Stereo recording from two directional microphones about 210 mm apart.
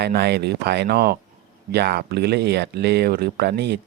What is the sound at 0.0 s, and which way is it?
Speech, 50° right (ahead or behind).